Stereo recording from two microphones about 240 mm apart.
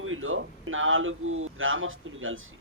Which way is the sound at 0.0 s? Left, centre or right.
Right.